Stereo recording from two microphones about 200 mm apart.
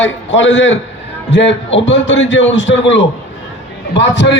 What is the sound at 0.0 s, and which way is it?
A man's voice, 65° left (ahead or behind).